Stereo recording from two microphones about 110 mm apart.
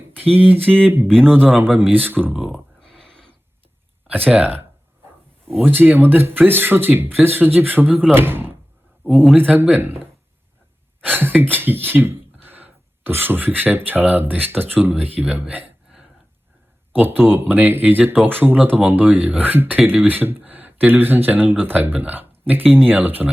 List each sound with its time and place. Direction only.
0.3 s speech: 15° right (ahead or behind)
1.0 s speech: 5° left (ahead or behind)
1.7 s speech: 15° right (ahead or behind)
2.3 s speech: 5° right (ahead or behind)
4.0 s speech: 15° right (ahead or behind)
5.6 s speech: 20° right (ahead or behind)
9.0 s speech: 5° left (ahead or behind)
9.3 s speech: 20° right (ahead or behind)
11.0 s speech: 15° right (ahead or behind)
16.9 s speech: 15° right (ahead or behind)